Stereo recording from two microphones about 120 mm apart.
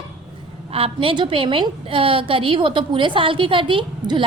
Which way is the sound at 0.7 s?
50° right (ahead or behind).